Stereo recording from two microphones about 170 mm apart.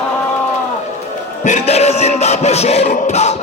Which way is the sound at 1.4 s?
40° left (ahead or behind).